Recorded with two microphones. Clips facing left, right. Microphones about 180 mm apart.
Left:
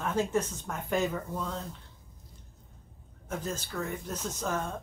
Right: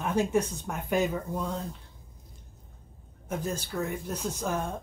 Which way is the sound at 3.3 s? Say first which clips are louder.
Right 3 dB; 15° right (ahead or behind).